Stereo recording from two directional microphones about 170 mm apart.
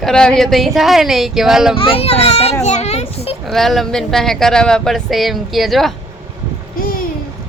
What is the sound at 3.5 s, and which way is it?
Speech, centre (ahead or behind).